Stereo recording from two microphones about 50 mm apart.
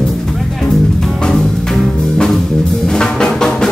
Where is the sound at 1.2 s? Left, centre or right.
Centre.